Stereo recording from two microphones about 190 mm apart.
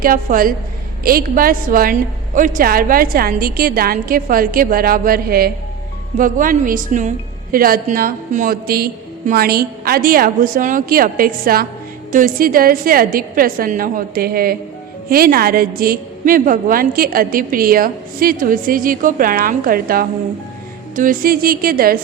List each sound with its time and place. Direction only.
0.0 s a woman's voice: 45° right (ahead or behind)